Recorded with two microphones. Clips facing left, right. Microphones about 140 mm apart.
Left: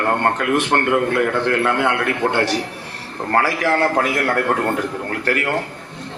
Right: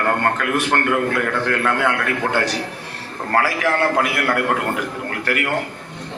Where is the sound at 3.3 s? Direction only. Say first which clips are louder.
Left 1 dB; 35° left (ahead or behind).